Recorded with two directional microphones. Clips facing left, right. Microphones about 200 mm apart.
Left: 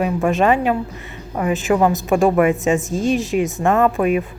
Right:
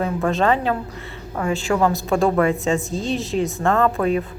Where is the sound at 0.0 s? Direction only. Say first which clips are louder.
Left 3 dB; 15° left (ahead or behind).